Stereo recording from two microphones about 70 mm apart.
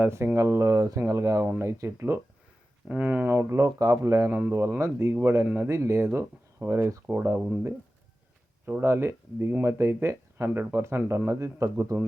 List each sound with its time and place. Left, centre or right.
0.0 s speech: right
2.9 s speech: right
3.2 s speech: right
4.3 s speech: right
4.8 s speech: right
8.6 s speech: right